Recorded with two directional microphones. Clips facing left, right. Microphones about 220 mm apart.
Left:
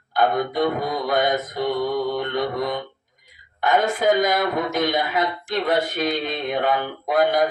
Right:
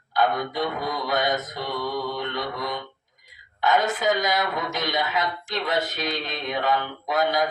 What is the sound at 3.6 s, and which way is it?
A woman's voice, 50° left (ahead or behind).